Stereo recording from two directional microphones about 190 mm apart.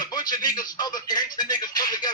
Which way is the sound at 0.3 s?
20° left (ahead or behind).